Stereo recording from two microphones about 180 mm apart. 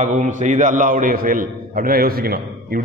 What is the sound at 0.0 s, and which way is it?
A man's voice, 45° right (ahead or behind).